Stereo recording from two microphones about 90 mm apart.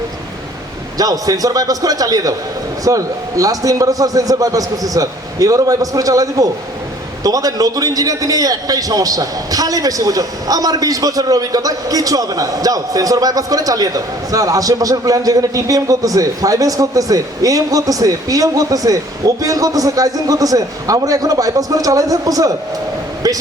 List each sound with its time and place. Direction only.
0.9 s a man's voice: 45° right (ahead or behind)